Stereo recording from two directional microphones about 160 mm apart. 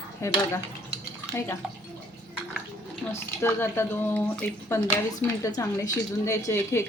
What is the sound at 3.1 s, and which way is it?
A woman's voice, 15° left (ahead or behind).